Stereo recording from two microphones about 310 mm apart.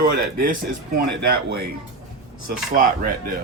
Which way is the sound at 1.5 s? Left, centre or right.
Right.